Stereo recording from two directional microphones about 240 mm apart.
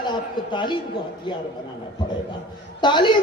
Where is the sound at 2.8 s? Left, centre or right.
Centre.